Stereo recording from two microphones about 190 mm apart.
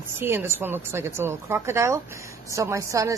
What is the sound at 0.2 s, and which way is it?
A woman's voice, 10° right (ahead or behind).